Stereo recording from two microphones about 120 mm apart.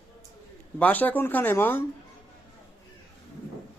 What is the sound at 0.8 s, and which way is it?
Speech, 15° left (ahead or behind).